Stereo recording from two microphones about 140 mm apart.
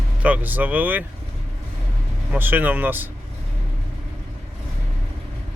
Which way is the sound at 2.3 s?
15° right (ahead or behind).